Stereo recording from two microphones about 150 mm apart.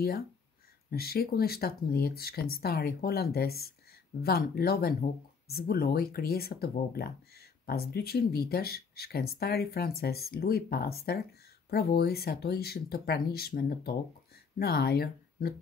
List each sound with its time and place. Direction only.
0.8 s speech: 90° left